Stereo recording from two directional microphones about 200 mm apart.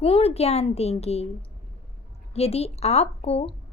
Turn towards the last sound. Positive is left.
turn(degrees=30)  # may be behind; listen again after turning